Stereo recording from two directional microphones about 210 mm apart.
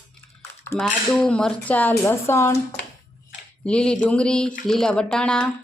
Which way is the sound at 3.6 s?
5° left (ahead or behind).